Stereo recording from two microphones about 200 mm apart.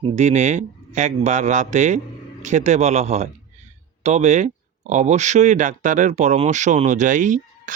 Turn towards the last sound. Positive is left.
turn(degrees=-40)  # may be behind; listen again after turning